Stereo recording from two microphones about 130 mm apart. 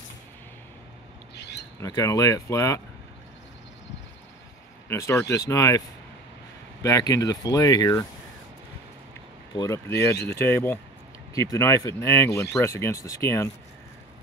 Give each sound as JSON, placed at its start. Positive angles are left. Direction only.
{"t": 1.8, "sound": "speech", "side_deg": 25}
{"t": 4.8, "sound": "speech", "side_deg": 20}
{"t": 9.6, "sound": "speech", "side_deg": 20}